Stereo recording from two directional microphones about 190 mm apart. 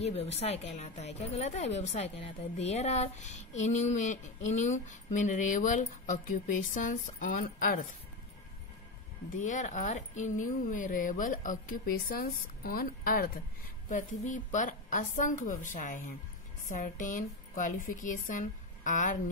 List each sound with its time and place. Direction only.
0.0 s a woman's voice: 35° left (ahead or behind)
9.4 s a woman's voice: 40° left (ahead or behind)